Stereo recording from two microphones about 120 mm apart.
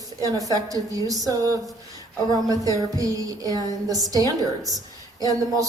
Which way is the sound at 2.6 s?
30° right (ahead or behind).